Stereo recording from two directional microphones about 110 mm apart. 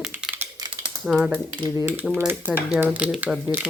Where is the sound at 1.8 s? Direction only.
20° right (ahead or behind).